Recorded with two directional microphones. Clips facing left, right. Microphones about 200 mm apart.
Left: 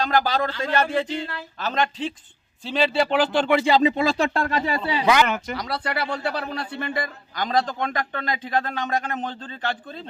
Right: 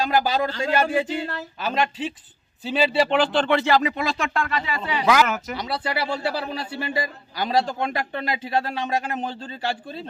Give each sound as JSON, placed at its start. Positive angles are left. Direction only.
{"t": 0.0, "sound": "speech", "side_deg": -10}
{"t": 3.8, "sound": "speech", "side_deg": 30}
{"t": 5.0, "sound": "speech", "side_deg": 0}